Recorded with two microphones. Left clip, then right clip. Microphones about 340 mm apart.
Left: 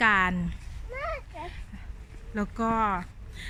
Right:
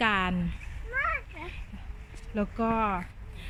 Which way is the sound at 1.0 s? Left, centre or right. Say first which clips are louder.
Right 3 dB; centre.